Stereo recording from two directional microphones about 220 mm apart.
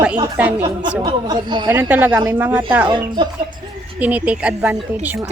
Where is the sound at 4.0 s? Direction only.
5° right (ahead or behind).